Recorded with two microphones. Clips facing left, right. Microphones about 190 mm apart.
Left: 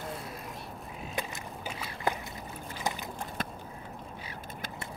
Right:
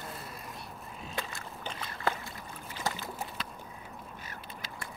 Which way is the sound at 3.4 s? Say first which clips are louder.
Left 6 dB; 50° left (ahead or behind).